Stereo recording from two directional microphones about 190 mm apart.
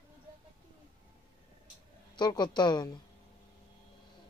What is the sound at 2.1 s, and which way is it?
Speech, 25° left (ahead or behind).